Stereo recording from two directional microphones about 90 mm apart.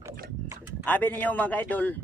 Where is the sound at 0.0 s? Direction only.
30° right (ahead or behind).